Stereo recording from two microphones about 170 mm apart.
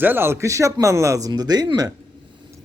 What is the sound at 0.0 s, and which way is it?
Speech, 10° right (ahead or behind).